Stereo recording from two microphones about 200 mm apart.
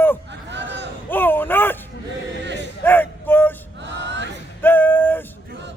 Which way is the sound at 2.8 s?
10° left (ahead or behind).